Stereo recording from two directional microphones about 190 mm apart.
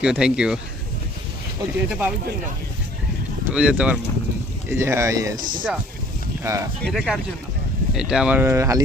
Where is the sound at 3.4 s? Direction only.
5° right (ahead or behind).